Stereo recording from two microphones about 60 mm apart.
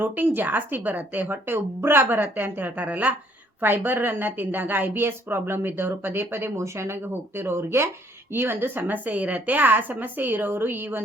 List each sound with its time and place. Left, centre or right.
0.0 s a woman's voice: right